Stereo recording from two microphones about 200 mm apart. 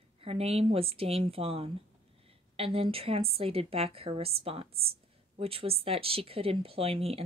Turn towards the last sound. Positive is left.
turn(degrees=-30)  # may be behind; listen again after turning